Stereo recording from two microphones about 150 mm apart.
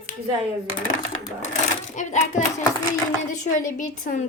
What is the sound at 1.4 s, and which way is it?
A child's voice, 55° left (ahead or behind).